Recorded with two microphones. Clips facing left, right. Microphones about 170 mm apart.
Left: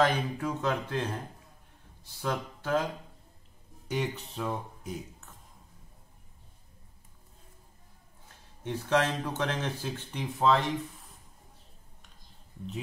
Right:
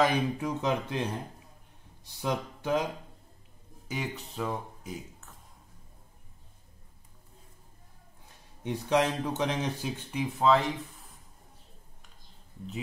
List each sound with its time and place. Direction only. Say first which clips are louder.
0.0 s speech: right 1 dB; 15° right (ahead or behind)
3.8 s speech: left 3 dB; centre (ahead or behind)
8.6 s speech: right 1 dB; 15° right (ahead or behind)
10.2 s speech: right 1 dB; centre (ahead or behind)